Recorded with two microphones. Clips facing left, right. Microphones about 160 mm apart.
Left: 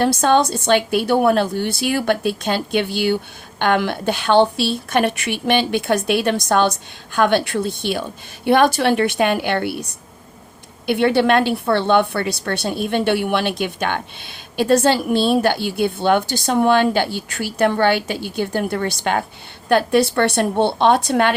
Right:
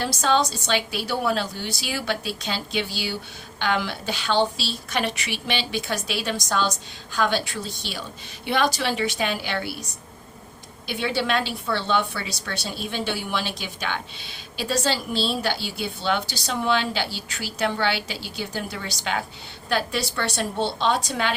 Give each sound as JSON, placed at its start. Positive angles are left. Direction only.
{"t": 0.0, "sound": "a woman's voice", "side_deg": 55}
{"t": 10.8, "sound": "a woman's voice", "side_deg": 60}